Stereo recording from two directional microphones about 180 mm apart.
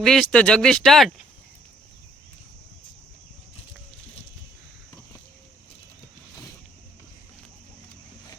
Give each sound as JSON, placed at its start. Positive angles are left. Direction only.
{"t": 0.0, "sound": "speech", "side_deg": 5}